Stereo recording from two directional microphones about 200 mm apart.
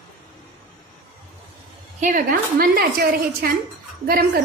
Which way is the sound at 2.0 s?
40° right (ahead or behind).